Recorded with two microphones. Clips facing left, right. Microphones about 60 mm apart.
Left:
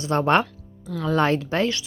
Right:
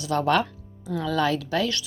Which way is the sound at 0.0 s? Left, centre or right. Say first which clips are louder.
Left 3 dB; left.